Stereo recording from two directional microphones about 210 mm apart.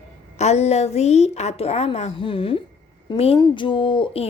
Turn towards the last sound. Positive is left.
turn(degrees=25)  # may be behind; listen again after turning